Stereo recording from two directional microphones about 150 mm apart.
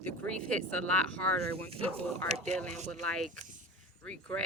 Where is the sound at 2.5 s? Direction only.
5° left (ahead or behind).